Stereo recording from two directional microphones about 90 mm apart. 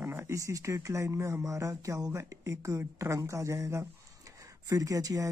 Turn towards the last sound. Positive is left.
turn(degrees=-40)  # may be behind; listen again after turning